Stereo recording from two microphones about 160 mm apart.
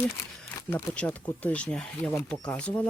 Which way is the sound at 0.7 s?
10° left (ahead or behind).